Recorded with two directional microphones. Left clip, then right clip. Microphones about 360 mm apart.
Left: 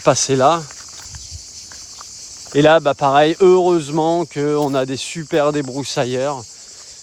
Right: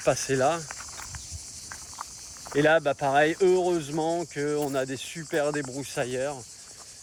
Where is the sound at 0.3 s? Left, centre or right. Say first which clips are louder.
Left 10 dB; left.